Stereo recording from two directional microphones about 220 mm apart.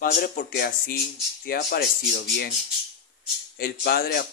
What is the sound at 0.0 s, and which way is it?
Speech, 40° left (ahead or behind).